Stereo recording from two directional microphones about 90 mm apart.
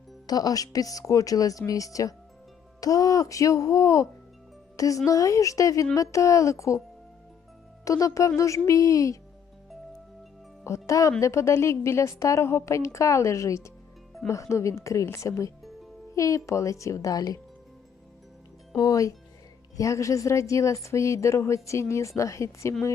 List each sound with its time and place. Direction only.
0.3 s speech: 45° left (ahead or behind)
7.9 s speech: 40° left (ahead or behind)
10.6 s music: 35° left (ahead or behind)
11.2 s speech: 35° left (ahead or behind)
18.8 s speech: 40° left (ahead or behind)